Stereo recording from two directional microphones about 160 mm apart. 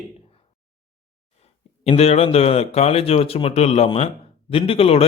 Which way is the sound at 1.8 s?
40° left (ahead or behind).